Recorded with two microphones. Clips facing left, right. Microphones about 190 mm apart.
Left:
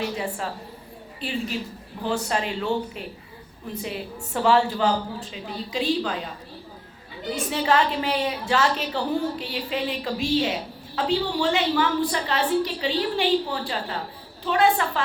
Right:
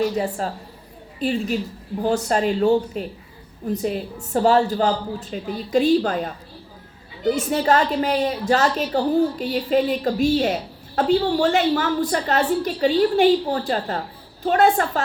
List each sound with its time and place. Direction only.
0.2 s a woman's voice: 40° right (ahead or behind)
7.3 s a woman's voice: 40° right (ahead or behind)